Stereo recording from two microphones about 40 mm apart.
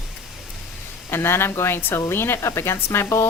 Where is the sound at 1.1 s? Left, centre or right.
Left.